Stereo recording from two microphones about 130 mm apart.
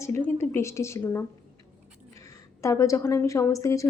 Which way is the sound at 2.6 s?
25° left (ahead or behind).